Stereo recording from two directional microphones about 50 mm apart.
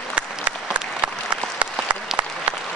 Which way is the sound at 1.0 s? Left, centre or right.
Right.